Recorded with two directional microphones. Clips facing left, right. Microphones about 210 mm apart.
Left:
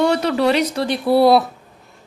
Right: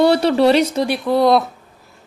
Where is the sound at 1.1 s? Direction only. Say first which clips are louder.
Left 2 dB; 10° left (ahead or behind).